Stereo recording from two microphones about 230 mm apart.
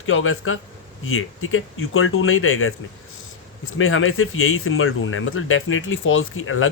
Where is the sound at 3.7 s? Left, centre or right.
Left.